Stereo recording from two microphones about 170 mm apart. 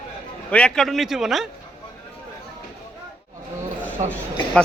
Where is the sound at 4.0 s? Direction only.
40° right (ahead or behind).